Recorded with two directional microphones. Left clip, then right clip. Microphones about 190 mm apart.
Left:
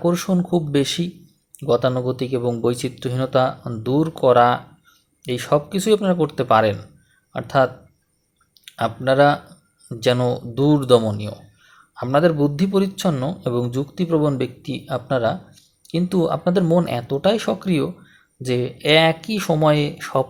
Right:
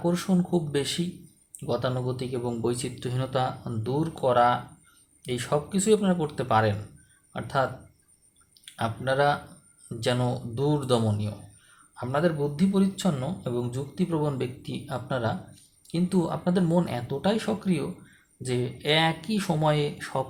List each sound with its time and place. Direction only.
0.0 s speech: 35° left (ahead or behind)